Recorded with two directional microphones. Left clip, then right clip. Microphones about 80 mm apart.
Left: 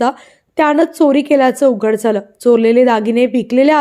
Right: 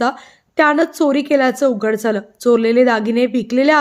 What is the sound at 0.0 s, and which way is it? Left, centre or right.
A woman's voice, left.